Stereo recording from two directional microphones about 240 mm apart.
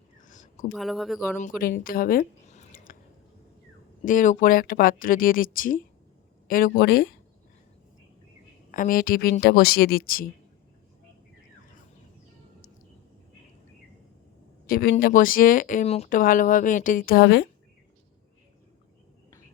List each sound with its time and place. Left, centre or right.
0.3 s a sound: left
0.7 s speech: centre
1.4 s speech: left
4.0 s speech: left
8.7 s speech: left
14.7 s speech: left